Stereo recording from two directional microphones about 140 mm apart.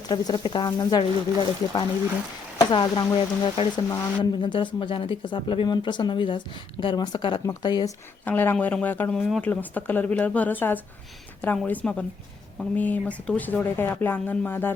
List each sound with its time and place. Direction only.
0.1 s speech: 30° left (ahead or behind)
8.2 s speech: 10° left (ahead or behind)